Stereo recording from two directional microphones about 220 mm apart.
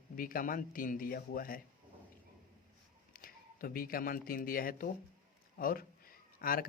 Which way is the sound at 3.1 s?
40° left (ahead or behind).